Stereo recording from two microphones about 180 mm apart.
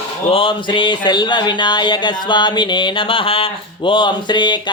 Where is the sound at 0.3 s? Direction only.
30° left (ahead or behind).